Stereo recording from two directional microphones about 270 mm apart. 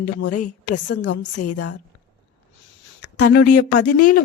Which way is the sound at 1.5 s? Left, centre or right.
Left.